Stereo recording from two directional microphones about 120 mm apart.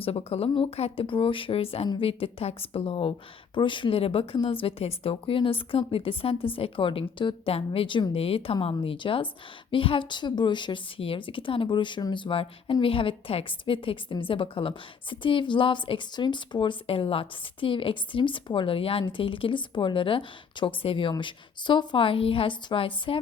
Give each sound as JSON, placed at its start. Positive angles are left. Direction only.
{"t": 0.0, "sound": "a woman's voice", "side_deg": 55}